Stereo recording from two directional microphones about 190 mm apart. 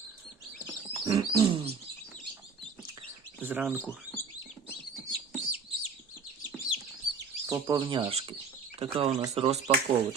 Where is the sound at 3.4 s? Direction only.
10° right (ahead or behind).